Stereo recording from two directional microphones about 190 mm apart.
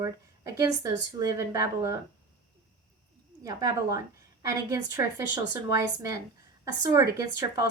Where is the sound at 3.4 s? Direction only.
20° right (ahead or behind).